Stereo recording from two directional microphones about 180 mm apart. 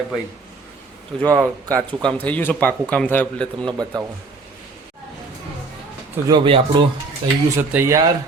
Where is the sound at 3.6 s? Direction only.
20° right (ahead or behind).